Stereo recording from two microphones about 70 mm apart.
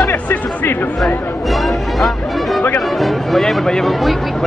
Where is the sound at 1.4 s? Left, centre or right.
Centre.